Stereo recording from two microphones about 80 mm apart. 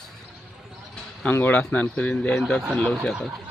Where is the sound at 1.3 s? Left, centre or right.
Left; by 3.1 s centre.